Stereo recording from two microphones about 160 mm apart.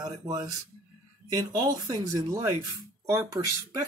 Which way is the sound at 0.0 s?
25° right (ahead or behind).